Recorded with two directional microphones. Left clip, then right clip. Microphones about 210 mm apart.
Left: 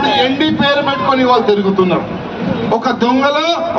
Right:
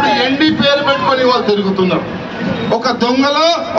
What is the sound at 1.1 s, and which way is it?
Speech, 55° right (ahead or behind).